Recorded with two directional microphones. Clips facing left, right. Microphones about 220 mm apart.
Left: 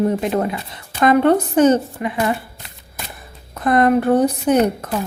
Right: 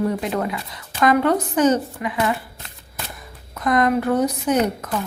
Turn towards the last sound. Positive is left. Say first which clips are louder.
# left 4 dB
turn(degrees=30)  # may be behind; listen again after turning